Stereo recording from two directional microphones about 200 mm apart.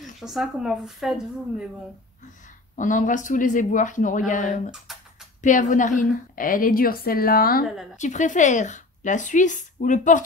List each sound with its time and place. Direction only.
0.2 s speech: centre (ahead or behind)
2.7 s a woman's voice: 40° left (ahead or behind)
4.9 s a sound: centre (ahead or behind)
5.4 s a woman's voice: 40° left (ahead or behind)